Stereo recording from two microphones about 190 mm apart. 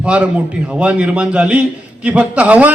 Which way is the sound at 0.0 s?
5° right (ahead or behind).